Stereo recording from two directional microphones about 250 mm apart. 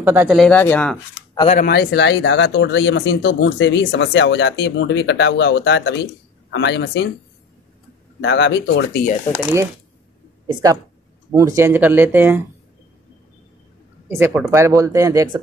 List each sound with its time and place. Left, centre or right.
0.0 s speech: centre
1.5 s speech: left
8.2 s speech: left
10.4 s a woman's voice: centre
14.0 s speech: centre